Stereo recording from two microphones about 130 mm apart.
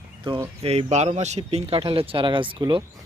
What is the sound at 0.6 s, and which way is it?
Speech, 55° right (ahead or behind).